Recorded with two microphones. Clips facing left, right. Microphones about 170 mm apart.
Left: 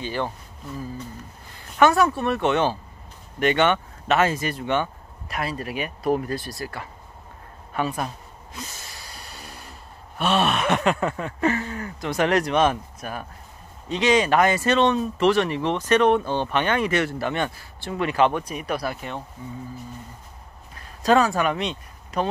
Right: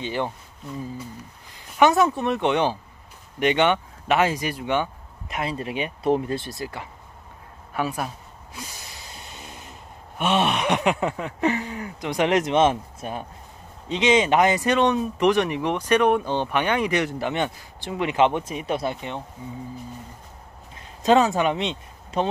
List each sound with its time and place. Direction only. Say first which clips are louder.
0.0 s speech: right 1 dB; 20° right (ahead or behind)
1.5 s speech: even; 15° right (ahead or behind)
5.3 s speech: right 1 dB; 20° right (ahead or behind)
7.7 s speech: left 1 dB; 5° right (ahead or behind)
8.5 s snort: left 1 dB; 15° right (ahead or behind)
13.8 s speech: even; 20° right (ahead or behind)
20.7 s speech: right 1 dB; 20° right (ahead or behind)